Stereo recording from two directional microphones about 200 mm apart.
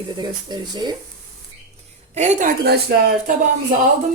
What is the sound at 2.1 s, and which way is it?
Speech, 35° right (ahead or behind).